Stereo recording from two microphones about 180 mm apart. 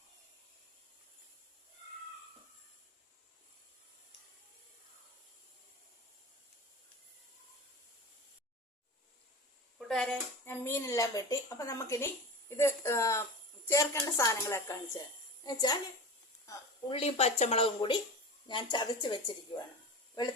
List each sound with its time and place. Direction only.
9.7 s a woman's voice: 5° left (ahead or behind); by 15.8 s 20° left (ahead or behind)
16.9 s a woman's voice: 35° left (ahead or behind)